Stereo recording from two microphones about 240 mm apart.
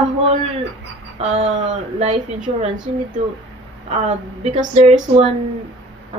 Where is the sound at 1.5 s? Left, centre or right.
Right.